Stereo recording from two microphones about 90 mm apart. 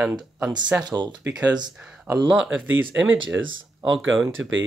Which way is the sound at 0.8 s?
55° right (ahead or behind).